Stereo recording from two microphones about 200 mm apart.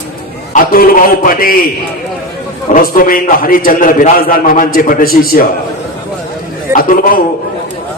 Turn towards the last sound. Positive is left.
turn(degrees=45)  # may be behind; listen again after turning